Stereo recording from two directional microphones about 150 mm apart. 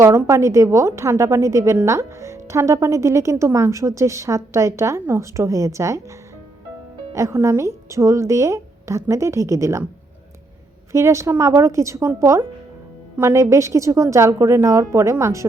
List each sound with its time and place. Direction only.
0.0 s a woman's voice: 20° right (ahead or behind)
10.9 s a woman's voice: 20° right (ahead or behind)